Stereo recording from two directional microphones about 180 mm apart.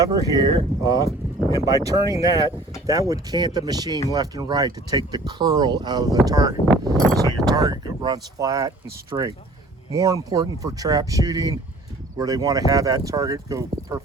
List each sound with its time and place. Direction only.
0.0 s speech: 20° right (ahead or behind)